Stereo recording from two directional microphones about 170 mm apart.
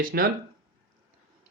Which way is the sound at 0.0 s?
60° right (ahead or behind).